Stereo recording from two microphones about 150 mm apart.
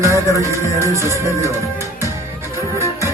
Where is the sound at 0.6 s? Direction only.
20° left (ahead or behind).